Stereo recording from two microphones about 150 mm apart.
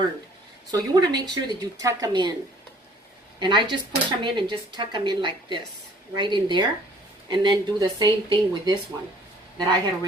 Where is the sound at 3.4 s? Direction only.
30° right (ahead or behind).